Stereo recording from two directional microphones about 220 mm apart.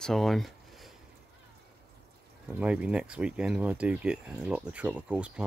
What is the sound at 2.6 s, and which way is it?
Speech, 5° right (ahead or behind).